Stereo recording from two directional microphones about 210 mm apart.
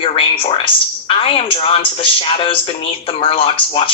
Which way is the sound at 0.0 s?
25° left (ahead or behind).